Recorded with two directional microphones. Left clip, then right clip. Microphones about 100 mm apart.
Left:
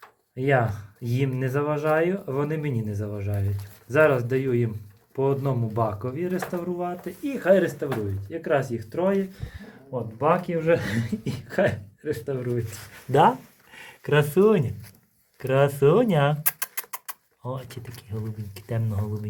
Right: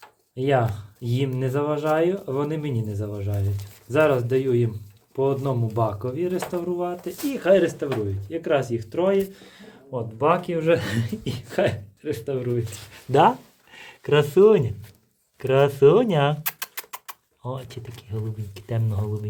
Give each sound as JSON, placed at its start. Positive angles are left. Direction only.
{"t": 0.3, "sound": "speech", "side_deg": -10}